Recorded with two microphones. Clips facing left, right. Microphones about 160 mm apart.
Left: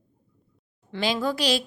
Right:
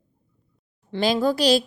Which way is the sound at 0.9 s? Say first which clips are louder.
Right 5 dB; 35° right (ahead or behind).